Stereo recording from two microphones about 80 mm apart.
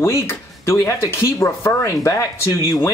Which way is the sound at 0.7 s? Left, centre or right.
Left.